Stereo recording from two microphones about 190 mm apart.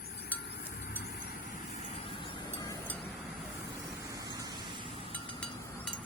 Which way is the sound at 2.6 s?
10° left (ahead or behind).